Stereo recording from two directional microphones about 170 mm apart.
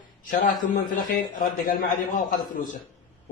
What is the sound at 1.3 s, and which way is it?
Speech, 60° left (ahead or behind).